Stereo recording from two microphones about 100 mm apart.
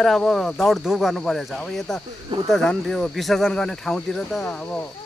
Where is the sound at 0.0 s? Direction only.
5° left (ahead or behind).